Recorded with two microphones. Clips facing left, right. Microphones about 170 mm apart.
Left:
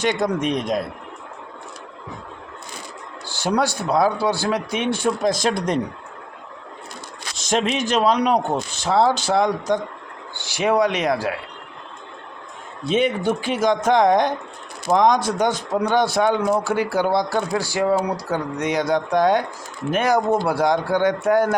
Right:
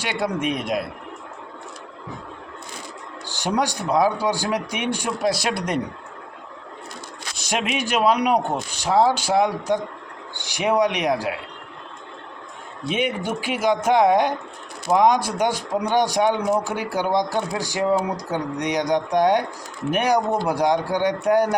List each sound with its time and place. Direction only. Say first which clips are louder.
0.0 s a man's voice: left 3 dB; 10° right (ahead or behind)
3.2 s a man's voice: left 2 dB; 15° right (ahead or behind)
7.3 s a man's voice: left 4 dB; 10° right (ahead or behind)
12.9 s a man's voice: left 5 dB; 10° right (ahead or behind)